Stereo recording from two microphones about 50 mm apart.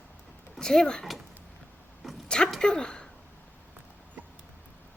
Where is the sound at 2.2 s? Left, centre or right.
Centre.